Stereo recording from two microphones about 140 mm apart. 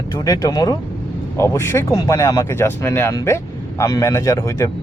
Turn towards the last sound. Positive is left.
turn(degrees=20)  # may be behind; listen again after turning